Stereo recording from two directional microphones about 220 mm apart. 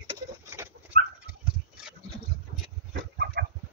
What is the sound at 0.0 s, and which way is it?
Pigeon, 15° right (ahead or behind).